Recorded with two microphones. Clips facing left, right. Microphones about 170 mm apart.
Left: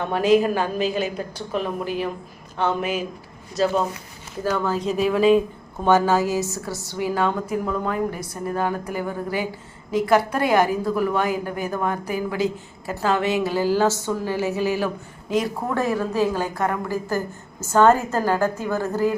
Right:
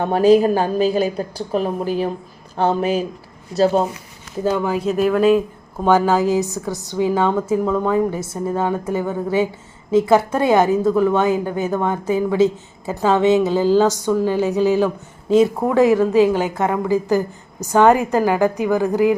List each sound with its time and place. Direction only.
0.0 s a woman's voice: 35° right (ahead or behind)
4.4 s a woman's voice: 15° right (ahead or behind)
4.9 s speech: centre (ahead or behind)
5.8 s a woman's voice: 10° right (ahead or behind)